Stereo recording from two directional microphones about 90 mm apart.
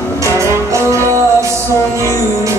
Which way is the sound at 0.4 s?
35° right (ahead or behind).